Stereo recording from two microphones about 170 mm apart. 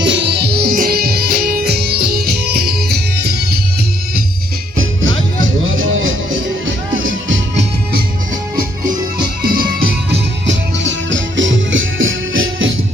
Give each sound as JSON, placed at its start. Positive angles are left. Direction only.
{"t": 0.0, "sound": "music", "side_deg": -85}
{"t": 0.7, "sound": "music", "side_deg": -55}
{"t": 7.3, "sound": "music", "side_deg": -90}
{"t": 9.4, "sound": "music", "side_deg": -60}